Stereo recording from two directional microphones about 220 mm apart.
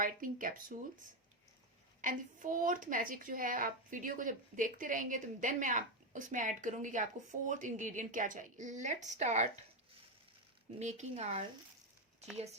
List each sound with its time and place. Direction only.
0.0 s a woman's voice: 40° right (ahead or behind)
2.0 s a woman's voice: 35° right (ahead or behind)
10.8 s a woman's voice: 30° right (ahead or behind)